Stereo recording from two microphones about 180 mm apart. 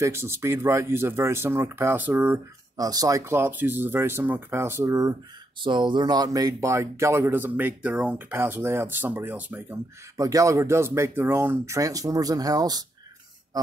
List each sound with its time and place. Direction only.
0.0 s speech: 15° right (ahead or behind)